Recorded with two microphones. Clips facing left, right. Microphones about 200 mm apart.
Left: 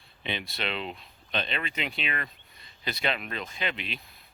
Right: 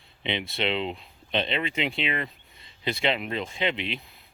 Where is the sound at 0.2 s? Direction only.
20° right (ahead or behind).